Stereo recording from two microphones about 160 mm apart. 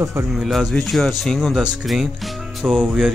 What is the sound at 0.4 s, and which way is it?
Speech, centre (ahead or behind).